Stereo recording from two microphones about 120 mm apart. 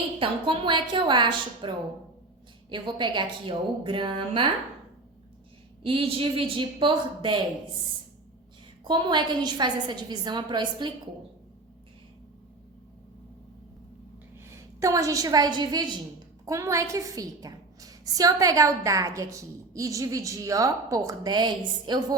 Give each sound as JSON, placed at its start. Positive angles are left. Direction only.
{"t": 0.2, "sound": "a woman's voice", "side_deg": -45}
{"t": 5.8, "sound": "a woman's voice", "side_deg": -50}
{"t": 8.8, "sound": "a woman's voice", "side_deg": -40}
{"t": 14.5, "sound": "a woman's voice", "side_deg": -25}
{"t": 16.5, "sound": "a woman's voice", "side_deg": -25}